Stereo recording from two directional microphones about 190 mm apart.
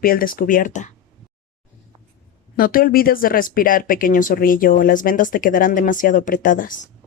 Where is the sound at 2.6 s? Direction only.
50° left (ahead or behind).